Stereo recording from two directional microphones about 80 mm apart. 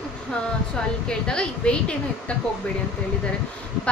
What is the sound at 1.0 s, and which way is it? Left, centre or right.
Speech, centre.